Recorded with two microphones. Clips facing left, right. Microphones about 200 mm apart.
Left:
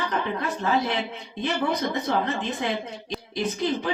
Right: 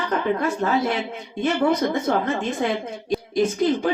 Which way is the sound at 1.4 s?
45° right (ahead or behind).